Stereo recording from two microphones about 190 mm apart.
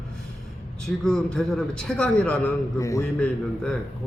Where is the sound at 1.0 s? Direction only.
5° left (ahead or behind).